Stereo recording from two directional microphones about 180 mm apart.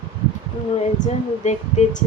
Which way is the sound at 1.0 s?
40° left (ahead or behind).